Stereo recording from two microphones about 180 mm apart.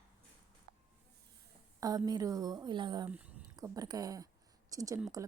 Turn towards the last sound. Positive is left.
turn(degrees=-20)  # may be behind; listen again after turning